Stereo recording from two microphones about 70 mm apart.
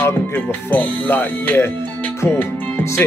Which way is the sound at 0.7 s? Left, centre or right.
Left.